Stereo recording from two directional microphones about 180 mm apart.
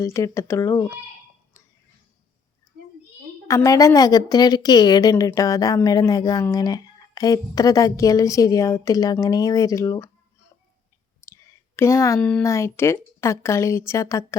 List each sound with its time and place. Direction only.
0.0 s a woman's voice: 15° left (ahead or behind)
3.4 s a woman's voice: 15° left (ahead or behind)
11.8 s a woman's voice: 15° left (ahead or behind)